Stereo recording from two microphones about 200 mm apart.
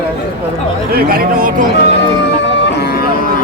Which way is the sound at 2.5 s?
55° left (ahead or behind).